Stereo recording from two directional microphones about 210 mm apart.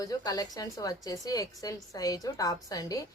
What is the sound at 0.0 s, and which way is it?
A woman's voice, 15° left (ahead or behind).